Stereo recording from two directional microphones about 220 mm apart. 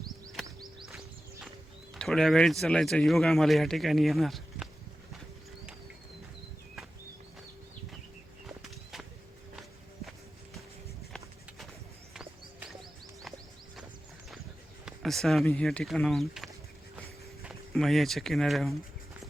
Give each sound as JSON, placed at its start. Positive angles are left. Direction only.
{"t": 0.4, "sound": "music", "side_deg": -20}
{"t": 0.9, "sound": "music", "side_deg": 0}
{"t": 1.9, "sound": "speech", "side_deg": 0}
{"t": 8.4, "sound": "a sound", "side_deg": 0}
{"t": 11.1, "sound": "a sound", "side_deg": 0}
{"t": 12.1, "sound": "music", "side_deg": -5}
{"t": 14.8, "sound": "speech", "side_deg": 0}